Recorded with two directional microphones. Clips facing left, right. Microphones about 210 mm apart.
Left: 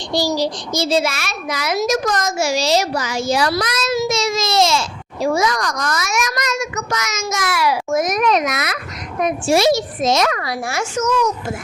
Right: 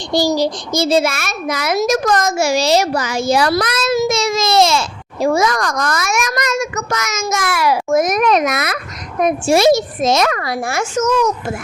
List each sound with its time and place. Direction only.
0.3 s a child's voice: 50° right (ahead or behind)